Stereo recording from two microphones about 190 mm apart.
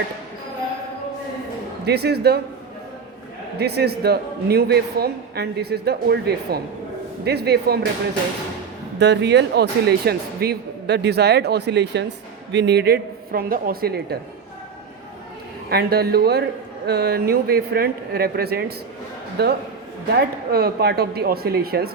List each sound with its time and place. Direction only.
1.8 s speech: 60° right (ahead or behind)
3.6 s speech: 55° right (ahead or behind)
9.0 s speech: 65° right (ahead or behind)
15.7 s speech: 55° right (ahead or behind)